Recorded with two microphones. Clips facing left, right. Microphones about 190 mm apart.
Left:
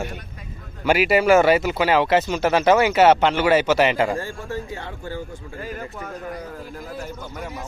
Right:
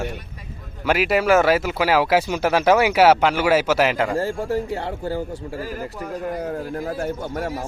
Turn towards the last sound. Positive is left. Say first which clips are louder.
# right 7 dB
turn(degrees=-60)  # may be behind; listen again after turning